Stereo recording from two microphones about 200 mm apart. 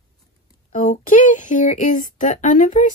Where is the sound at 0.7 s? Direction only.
40° left (ahead or behind).